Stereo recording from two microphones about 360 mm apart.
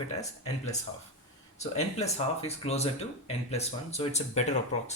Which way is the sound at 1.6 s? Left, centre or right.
Centre.